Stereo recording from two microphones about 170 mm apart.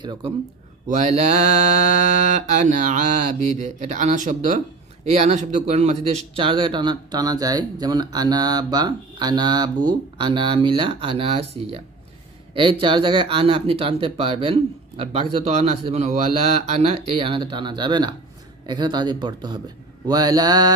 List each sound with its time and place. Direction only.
0.0 s speech: 30° right (ahead or behind)
0.9 s mantra: 40° right (ahead or behind)
6.4 s speech: 30° right (ahead or behind)